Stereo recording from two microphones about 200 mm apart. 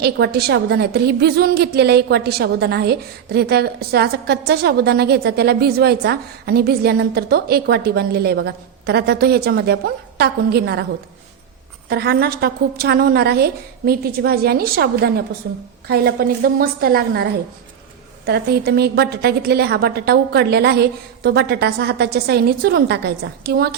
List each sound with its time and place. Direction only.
0.0 s a woman's voice: 55° right (ahead or behind)
11.9 s a woman's voice: 50° right (ahead or behind)